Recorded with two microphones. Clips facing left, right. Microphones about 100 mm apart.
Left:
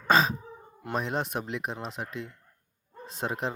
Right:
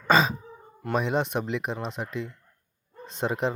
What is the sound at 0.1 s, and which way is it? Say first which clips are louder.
Speech: right 2 dB; centre (ahead or behind).